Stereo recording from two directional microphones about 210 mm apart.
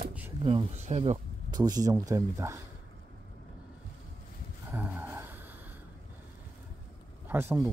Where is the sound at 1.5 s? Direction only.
20° right (ahead or behind).